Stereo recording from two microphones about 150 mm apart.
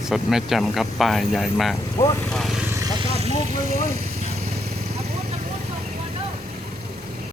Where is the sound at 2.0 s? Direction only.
20° left (ahead or behind).